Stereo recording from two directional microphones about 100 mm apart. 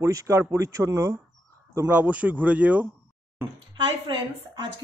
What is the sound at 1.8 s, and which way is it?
Speech, 15° right (ahead or behind).